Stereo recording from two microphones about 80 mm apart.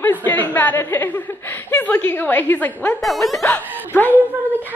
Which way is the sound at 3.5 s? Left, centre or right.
Left.